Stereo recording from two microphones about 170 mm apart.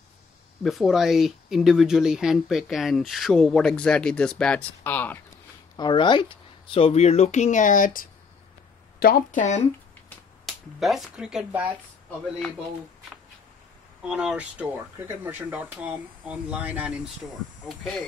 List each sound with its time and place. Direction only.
0.7 s speech: centre (ahead or behind)
5.8 s speech: 25° left (ahead or behind); by 9.6 s 50° left (ahead or behind)
10.4 s speech: centre (ahead or behind)
14.0 s speech: 5° right (ahead or behind)